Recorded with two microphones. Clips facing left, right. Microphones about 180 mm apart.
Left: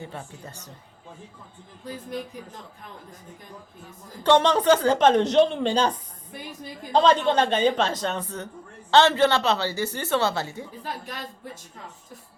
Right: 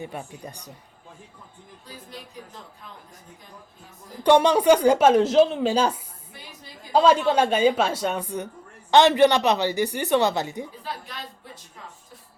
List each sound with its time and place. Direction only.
0.0 s speech: 15° right (ahead or behind)
1.8 s speech: 50° left (ahead or behind)
4.2 s speech: 10° right (ahead or behind)
10.8 s speech: 45° left (ahead or behind)